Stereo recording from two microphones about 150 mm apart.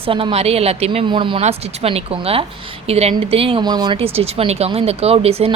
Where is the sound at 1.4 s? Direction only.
45° right (ahead or behind).